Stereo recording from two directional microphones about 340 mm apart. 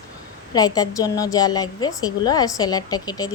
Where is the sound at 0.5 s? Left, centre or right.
Centre.